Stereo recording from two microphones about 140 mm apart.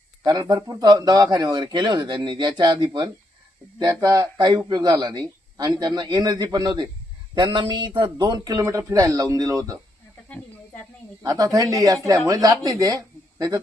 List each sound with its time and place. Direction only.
0.2 s speech: 30° right (ahead or behind)
10.2 s snake: 10° left (ahead or behind)
11.2 s speech: 25° right (ahead or behind)